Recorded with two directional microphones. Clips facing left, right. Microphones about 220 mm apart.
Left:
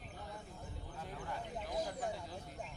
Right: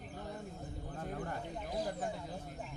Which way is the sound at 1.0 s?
50° right (ahead or behind).